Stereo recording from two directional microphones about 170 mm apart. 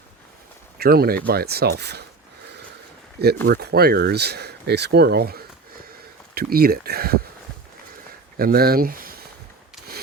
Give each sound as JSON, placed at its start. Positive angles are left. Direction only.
{"t": 0.8, "sound": "speech", "side_deg": -65}
{"t": 3.4, "sound": "speech", "side_deg": -75}
{"t": 8.4, "sound": "speech", "side_deg": -60}